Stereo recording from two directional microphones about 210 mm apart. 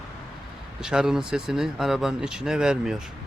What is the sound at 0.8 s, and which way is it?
Speech, 5° right (ahead or behind).